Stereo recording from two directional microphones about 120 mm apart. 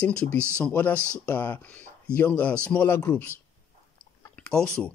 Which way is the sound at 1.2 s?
15° left (ahead or behind).